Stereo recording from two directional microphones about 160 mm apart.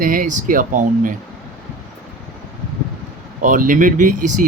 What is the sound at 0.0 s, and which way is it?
Speech, 60° right (ahead or behind).